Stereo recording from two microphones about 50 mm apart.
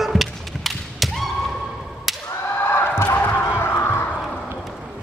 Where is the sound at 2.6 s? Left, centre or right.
Left.